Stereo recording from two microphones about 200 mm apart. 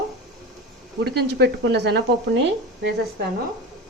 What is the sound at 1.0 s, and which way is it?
Speech, 55° right (ahead or behind).